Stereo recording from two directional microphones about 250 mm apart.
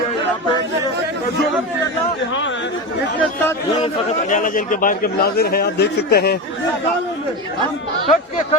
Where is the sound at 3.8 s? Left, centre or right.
Left.